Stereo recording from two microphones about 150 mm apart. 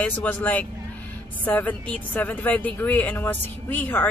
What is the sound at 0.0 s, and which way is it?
Speech, 10° left (ahead or behind).